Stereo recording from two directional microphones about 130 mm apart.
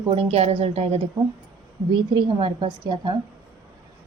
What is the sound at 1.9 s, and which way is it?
A woman's voice, 40° right (ahead or behind).